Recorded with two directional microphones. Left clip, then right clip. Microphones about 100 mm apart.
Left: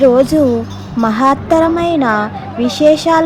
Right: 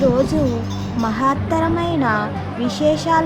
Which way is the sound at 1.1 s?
65° left (ahead or behind).